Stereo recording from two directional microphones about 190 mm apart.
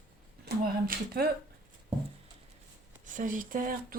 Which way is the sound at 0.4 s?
55° right (ahead or behind).